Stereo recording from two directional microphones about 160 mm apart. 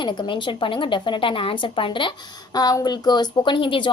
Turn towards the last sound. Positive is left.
turn(degrees=30)  # may be behind; listen again after turning